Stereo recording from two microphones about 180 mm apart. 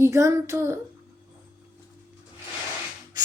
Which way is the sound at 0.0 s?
15° right (ahead or behind).